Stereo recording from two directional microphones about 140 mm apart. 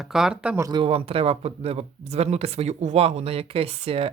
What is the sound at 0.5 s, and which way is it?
Speech, 25° right (ahead or behind).